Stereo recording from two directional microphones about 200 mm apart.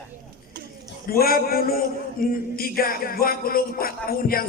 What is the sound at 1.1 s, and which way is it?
A man's voice, 50° left (ahead or behind).